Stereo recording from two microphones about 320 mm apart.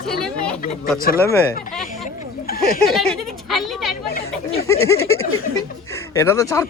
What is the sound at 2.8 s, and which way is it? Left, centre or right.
Speech, centre.